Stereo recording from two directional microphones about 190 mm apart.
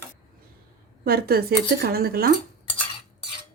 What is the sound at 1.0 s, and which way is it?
Speech, 55° right (ahead or behind).